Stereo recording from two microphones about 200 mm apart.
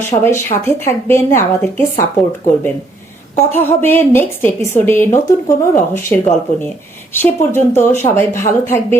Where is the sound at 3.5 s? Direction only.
10° left (ahead or behind).